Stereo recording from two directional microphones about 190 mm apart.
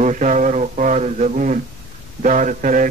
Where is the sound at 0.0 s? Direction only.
40° right (ahead or behind).